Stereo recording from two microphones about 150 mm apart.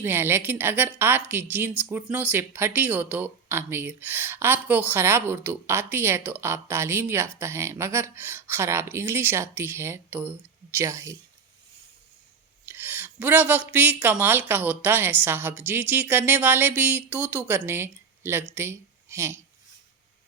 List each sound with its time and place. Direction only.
0.0 s a woman's voice: 15° right (ahead or behind)
12.6 s a woman's voice: 15° right (ahead or behind)